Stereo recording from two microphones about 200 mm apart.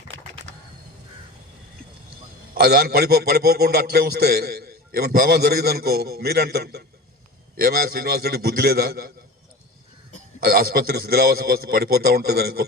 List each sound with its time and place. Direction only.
2.6 s a man's voice: 50° right (ahead or behind)
10.4 s a man's voice: 50° right (ahead or behind)